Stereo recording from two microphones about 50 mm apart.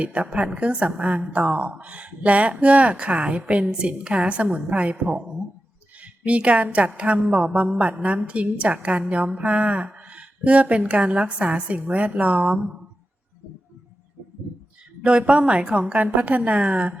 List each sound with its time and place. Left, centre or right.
0.0 s a woman's voice: right
15.0 s a woman's voice: right